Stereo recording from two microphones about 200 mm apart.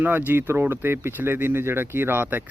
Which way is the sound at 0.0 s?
10° right (ahead or behind).